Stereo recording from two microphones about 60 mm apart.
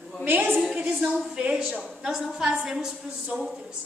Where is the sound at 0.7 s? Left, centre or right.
Centre.